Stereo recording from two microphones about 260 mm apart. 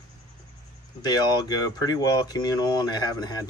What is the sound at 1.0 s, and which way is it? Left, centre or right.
Speech, centre.